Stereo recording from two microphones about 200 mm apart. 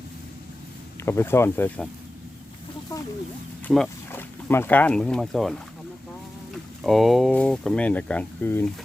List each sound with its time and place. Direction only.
1.0 s speech: 10° left (ahead or behind)
3.7 s speech: 5° left (ahead or behind)
6.8 s speech: centre (ahead or behind)